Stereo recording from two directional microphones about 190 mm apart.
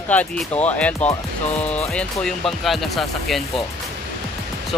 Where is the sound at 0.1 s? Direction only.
10° left (ahead or behind).